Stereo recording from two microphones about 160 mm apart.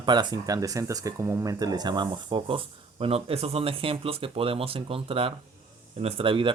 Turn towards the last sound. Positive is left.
turn(degrees=-30)  # may be behind; listen again after turning